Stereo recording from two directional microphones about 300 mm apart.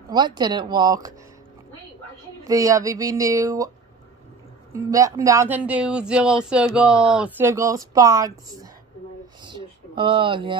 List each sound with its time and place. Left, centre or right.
0.1 s speech: centre
2.4 s speech: centre
4.7 s speech: centre
9.4 s a sound: centre